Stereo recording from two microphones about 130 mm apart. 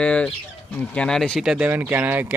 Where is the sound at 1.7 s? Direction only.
15° right (ahead or behind).